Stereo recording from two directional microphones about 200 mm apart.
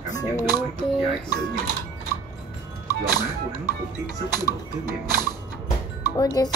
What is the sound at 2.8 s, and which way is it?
Speech, 20° left (ahead or behind).